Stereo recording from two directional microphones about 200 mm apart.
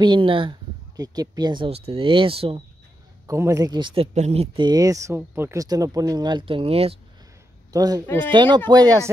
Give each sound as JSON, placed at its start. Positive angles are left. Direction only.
{"t": 0.0, "sound": "speech", "side_deg": -25}
{"t": 3.3, "sound": "speech", "side_deg": -15}
{"t": 7.7, "sound": "speech", "side_deg": -20}